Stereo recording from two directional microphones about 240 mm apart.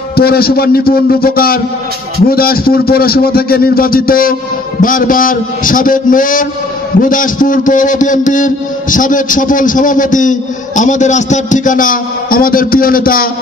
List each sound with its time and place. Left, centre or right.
0.1 s a man's voice: left